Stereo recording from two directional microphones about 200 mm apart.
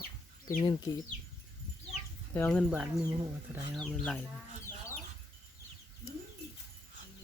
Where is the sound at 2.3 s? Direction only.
5° left (ahead or behind).